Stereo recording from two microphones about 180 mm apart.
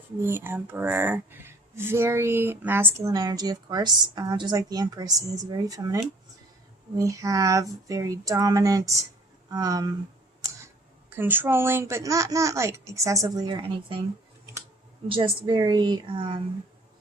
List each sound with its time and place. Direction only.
0.2 s speech: 15° right (ahead or behind)
11.1 s speech: 10° right (ahead or behind); by 14.0 s 25° right (ahead or behind)
15.1 s speech: 25° right (ahead or behind)